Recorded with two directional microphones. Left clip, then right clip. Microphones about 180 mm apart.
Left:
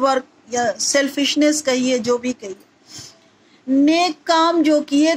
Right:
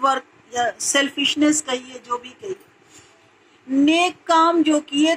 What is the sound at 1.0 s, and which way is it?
Speech, 15° left (ahead or behind).